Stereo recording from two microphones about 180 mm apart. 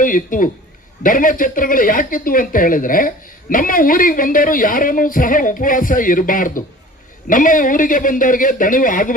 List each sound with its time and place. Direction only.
0.0 s a man's voice: 50° left (ahead or behind)